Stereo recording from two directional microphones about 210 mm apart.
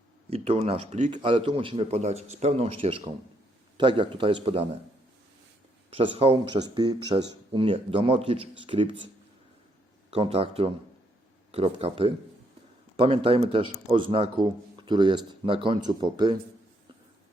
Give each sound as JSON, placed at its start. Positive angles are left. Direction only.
{"t": 0.3, "sound": "speech", "side_deg": -30}
{"t": 1.1, "sound": "speech", "side_deg": -25}
{"t": 5.9, "sound": "speech", "side_deg": -25}
{"t": 10.1, "sound": "speech", "side_deg": -30}